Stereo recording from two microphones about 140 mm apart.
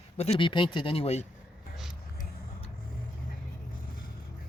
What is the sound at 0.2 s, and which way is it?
Speech, 40° left (ahead or behind).